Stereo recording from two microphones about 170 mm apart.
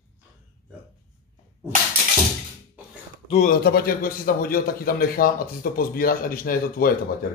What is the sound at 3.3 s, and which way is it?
Speech, 45° left (ahead or behind).